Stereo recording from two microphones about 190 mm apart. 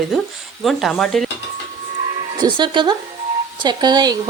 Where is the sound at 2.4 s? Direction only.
25° right (ahead or behind).